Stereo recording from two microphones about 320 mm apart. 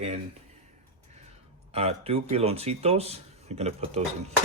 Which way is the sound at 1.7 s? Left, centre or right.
Centre.